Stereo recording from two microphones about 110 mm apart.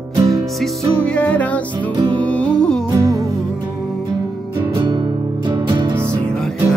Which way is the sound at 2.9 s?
30° right (ahead or behind).